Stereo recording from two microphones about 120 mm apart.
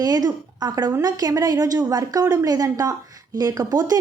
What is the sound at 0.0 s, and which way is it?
A woman's voice, 35° right (ahead or behind).